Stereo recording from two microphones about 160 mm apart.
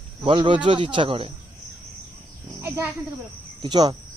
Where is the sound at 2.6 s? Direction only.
15° right (ahead or behind).